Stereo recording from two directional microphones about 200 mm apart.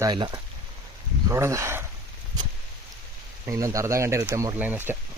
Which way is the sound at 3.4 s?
15° right (ahead or behind).